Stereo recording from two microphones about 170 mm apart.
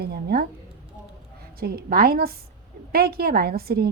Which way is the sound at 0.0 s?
65° right (ahead or behind).